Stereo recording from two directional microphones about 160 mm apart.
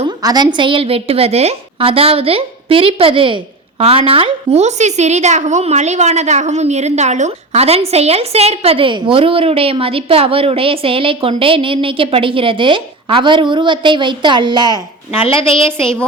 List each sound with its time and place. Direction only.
0.2 s a woman's voice: 25° right (ahead or behind)